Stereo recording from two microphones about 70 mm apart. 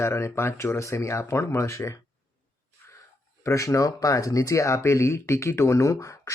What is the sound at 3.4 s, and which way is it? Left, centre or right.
Speech, left.